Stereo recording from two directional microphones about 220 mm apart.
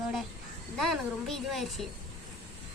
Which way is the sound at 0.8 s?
Centre (ahead or behind).